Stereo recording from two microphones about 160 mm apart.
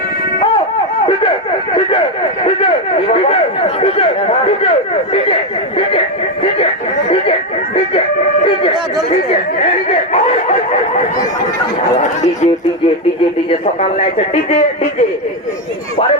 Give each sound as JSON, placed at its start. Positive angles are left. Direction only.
{"t": 3.1, "sound": "speech", "side_deg": 40}
{"t": 9.0, "sound": "speech", "side_deg": 40}
{"t": 14.0, "sound": "speech", "side_deg": 40}